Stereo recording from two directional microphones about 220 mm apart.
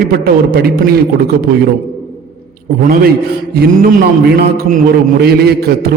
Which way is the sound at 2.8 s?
40° right (ahead or behind).